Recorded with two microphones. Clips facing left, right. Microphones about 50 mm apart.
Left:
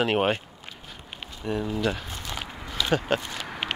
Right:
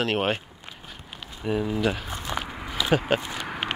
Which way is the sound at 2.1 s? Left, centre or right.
Right.